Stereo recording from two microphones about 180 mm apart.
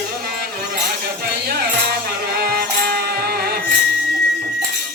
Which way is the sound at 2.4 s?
60° right (ahead or behind).